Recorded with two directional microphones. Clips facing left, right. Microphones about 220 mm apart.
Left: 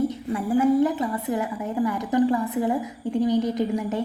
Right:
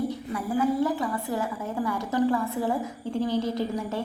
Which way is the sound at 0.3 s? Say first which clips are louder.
Left 6 dB; 20° left (ahead or behind).